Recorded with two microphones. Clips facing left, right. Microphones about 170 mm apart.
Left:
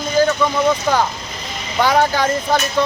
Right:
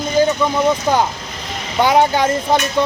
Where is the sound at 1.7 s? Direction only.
20° right (ahead or behind).